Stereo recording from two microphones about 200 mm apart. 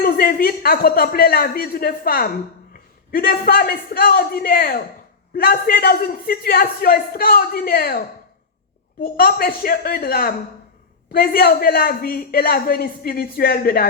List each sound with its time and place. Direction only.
0.0 s a man's voice: 45° left (ahead or behind)